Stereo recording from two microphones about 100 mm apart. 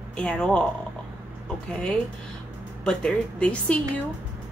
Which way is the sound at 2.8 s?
10° left (ahead or behind).